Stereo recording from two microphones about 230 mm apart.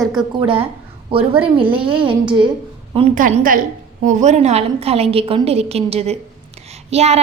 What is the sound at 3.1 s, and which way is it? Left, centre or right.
A woman's voice, right.